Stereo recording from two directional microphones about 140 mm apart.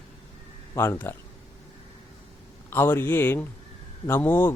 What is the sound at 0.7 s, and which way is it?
Speech, 20° left (ahead or behind).